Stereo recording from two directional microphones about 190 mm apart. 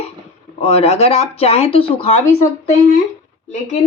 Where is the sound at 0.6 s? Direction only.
35° left (ahead or behind).